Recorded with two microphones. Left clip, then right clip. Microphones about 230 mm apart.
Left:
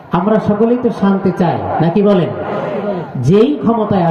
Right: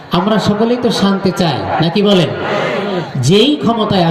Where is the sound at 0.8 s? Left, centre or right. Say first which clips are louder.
Right 1 dB; right.